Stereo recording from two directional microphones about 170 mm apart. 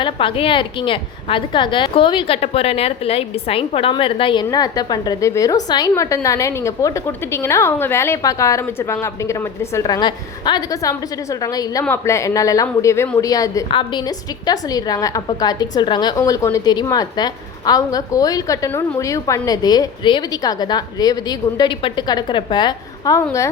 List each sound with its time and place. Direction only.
0.0 s a woman's voice: 30° left (ahead or behind)
13.7 s a woman's voice: 30° left (ahead or behind)
14.4 s a woman's voice: 20° left (ahead or behind)